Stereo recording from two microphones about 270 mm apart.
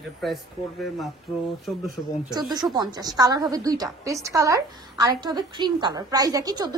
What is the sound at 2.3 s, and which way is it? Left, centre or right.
A woman's voice, centre.